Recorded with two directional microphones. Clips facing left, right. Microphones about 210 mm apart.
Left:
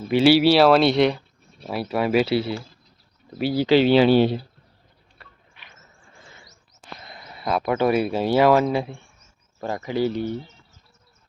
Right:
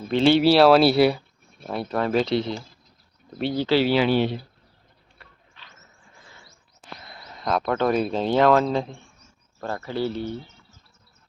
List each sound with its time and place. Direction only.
0.1 s speech: 5° left (ahead or behind); by 4.4 s 35° left (ahead or behind)
5.6 s vehicle: 10° left (ahead or behind)
7.0 s a sound: 20° left (ahead or behind)
7.3 s speech: 5° left (ahead or behind)